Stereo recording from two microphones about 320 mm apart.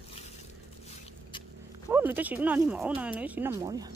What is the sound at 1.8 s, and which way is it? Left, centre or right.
Speech, centre.